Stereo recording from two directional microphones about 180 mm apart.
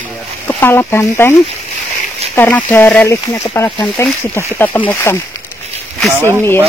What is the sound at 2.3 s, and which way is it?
Speech, 10° left (ahead or behind).